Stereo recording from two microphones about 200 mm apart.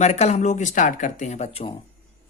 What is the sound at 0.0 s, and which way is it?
Speech, 35° left (ahead or behind).